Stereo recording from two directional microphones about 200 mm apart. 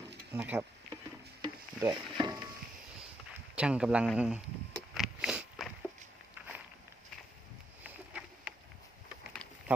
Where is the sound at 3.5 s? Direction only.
5° right (ahead or behind).